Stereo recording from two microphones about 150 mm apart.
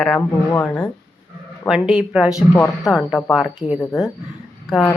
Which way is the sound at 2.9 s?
5° right (ahead or behind).